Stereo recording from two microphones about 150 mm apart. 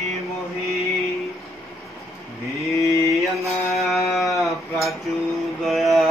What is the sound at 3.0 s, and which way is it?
Mantra, centre (ahead or behind).